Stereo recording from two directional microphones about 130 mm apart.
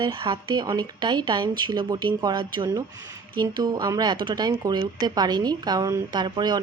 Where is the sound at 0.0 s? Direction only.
40° right (ahead or behind).